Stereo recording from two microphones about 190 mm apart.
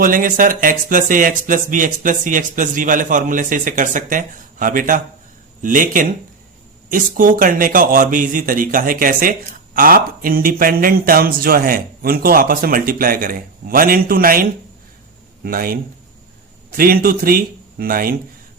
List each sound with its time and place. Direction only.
0.0 s speech: 45° right (ahead or behind)
15.4 s speech: 50° right (ahead or behind)